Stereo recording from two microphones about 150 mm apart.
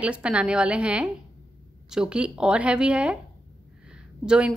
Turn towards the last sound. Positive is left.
turn(degrees=-5)  # may be behind; listen again after turning